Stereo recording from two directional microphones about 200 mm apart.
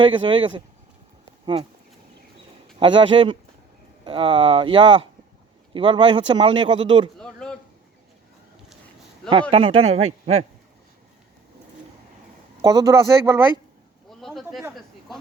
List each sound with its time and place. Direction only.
0.0 s speech: 25° right (ahead or behind)
2.7 s speech: 25° right (ahead or behind)
7.2 s a sound: 5° left (ahead or behind)
9.3 s speech: 25° right (ahead or behind)
12.6 s speech: 15° right (ahead or behind)
14.1 s a sound: centre (ahead or behind)